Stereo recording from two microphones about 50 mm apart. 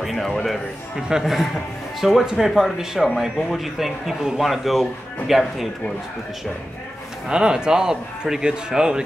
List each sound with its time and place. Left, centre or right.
0.0 s a man's voice: centre
0.3 s a man's voice: centre
1.2 s speech: centre
7.2 s speech: centre